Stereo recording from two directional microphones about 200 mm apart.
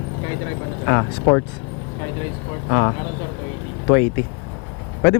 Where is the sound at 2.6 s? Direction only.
20° left (ahead or behind).